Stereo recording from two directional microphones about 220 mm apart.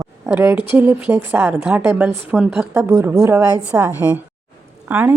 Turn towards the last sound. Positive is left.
turn(degrees=-10)  # may be behind; listen again after turning